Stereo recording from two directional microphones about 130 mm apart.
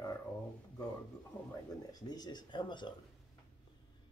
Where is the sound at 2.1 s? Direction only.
30° left (ahead or behind).